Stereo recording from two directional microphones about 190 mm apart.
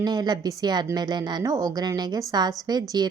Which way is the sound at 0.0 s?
20° right (ahead or behind).